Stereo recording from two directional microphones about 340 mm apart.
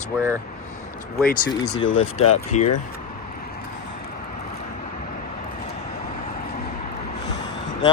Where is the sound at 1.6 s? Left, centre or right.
Left.